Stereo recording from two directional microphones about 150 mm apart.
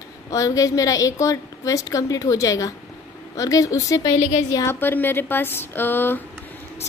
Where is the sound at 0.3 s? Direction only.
20° left (ahead or behind).